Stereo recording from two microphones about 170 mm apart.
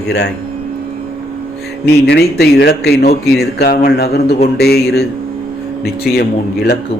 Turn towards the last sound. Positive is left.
turn(degrees=65)  # may be behind; listen again after turning